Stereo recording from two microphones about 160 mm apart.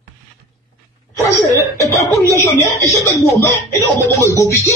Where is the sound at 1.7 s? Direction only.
20° left (ahead or behind).